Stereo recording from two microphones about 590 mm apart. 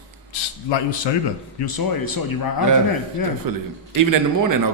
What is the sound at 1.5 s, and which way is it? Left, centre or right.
A man's voice, left.